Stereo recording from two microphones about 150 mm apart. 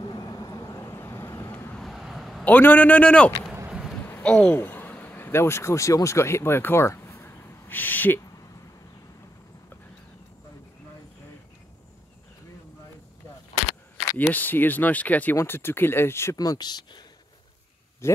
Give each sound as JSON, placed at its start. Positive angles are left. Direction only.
{"t": 0.0, "sound": "vehicle", "side_deg": 30}
{"t": 1.8, "sound": "vehicle", "side_deg": 0}
{"t": 2.4, "sound": "speech", "side_deg": 10}
{"t": 3.5, "sound": "a sound", "side_deg": -10}
{"t": 4.0, "sound": "speech", "side_deg": 10}
{"t": 14.1, "sound": "speech", "side_deg": 10}
{"t": 18.0, "sound": "speech", "side_deg": 20}